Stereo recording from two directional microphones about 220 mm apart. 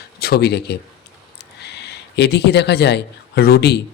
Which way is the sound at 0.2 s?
45° left (ahead or behind).